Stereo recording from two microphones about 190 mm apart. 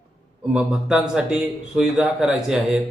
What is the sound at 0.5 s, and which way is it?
Speech, 5° right (ahead or behind).